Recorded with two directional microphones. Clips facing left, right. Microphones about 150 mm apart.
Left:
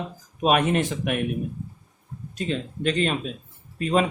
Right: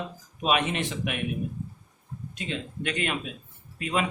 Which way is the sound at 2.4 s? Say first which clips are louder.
Left 6 dB; 35° left (ahead or behind).